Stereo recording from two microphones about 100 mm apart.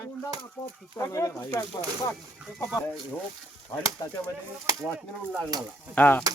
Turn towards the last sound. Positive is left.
turn(degrees=15)  # may be behind; listen again after turning